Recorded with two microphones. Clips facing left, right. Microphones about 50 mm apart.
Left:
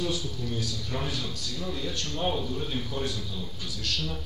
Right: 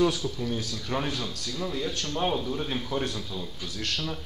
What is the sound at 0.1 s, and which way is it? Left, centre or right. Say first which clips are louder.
A man's voice: right 2 dB; right.